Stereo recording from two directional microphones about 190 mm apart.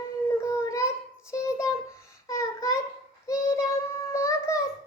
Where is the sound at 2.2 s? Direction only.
15° left (ahead or behind).